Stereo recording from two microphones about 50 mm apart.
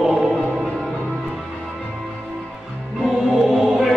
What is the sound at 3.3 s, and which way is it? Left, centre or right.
Music, centre.